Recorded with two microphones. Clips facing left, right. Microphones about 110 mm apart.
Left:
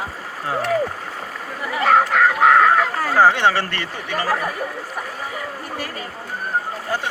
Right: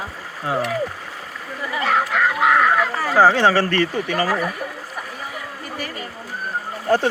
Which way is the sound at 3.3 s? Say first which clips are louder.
Right 2 dB; 35° right (ahead or behind).